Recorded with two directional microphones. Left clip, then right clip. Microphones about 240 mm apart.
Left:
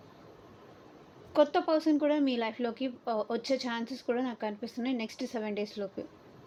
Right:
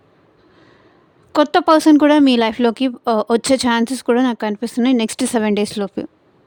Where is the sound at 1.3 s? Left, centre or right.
Right.